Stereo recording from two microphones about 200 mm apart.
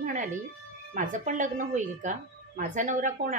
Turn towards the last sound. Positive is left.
turn(degrees=-40)  # may be behind; listen again after turning